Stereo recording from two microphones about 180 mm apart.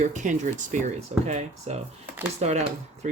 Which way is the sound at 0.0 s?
45° right (ahead or behind).